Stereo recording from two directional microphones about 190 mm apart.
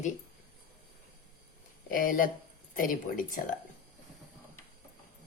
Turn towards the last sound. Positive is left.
turn(degrees=45)  # may be behind; listen again after turning